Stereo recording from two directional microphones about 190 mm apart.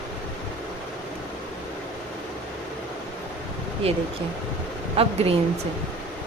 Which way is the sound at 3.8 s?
30° right (ahead or behind).